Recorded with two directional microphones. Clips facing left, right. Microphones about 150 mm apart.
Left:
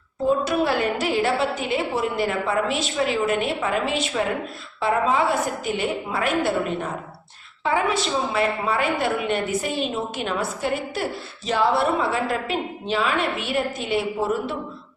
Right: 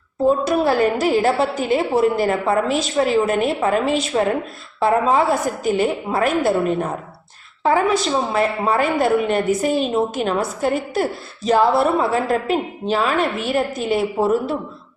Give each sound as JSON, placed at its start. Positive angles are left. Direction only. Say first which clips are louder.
{"t": 0.3, "sound": "a woman's voice", "louder": "right 4 dB", "side_deg": -40}